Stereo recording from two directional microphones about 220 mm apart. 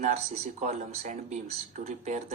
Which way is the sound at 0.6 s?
30° right (ahead or behind).